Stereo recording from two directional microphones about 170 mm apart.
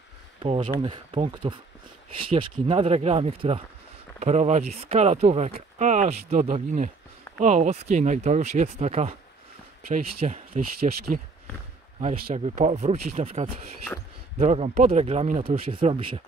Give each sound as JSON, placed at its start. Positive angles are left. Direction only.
{"t": 0.4, "sound": "speech", "side_deg": -30}
{"t": 9.9, "sound": "speech", "side_deg": -50}
{"t": 12.4, "sound": "speech", "side_deg": -40}